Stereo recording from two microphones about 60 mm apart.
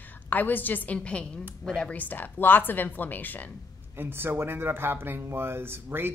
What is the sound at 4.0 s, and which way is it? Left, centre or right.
Speech, right.